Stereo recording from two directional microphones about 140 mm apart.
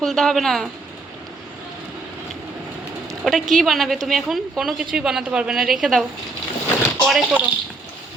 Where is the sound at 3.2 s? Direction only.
Centre (ahead or behind).